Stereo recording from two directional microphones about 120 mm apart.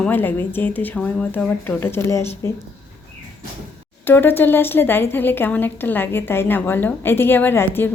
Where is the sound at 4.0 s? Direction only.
15° left (ahead or behind).